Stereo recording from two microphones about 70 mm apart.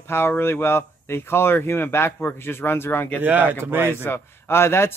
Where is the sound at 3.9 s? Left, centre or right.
Left.